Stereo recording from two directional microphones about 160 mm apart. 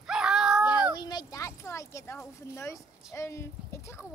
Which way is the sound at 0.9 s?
25° left (ahead or behind).